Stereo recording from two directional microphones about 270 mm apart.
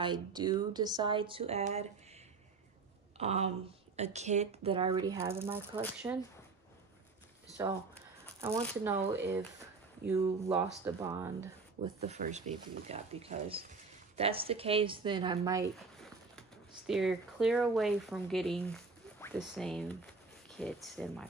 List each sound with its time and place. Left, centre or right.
0.0 s speech: centre
3.2 s speech: right
8.8 s speech: centre
11.8 s speech: right
15.7 s speech: centre